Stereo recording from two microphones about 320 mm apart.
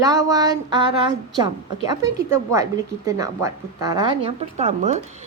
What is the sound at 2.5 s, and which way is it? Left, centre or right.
A woman's voice, centre.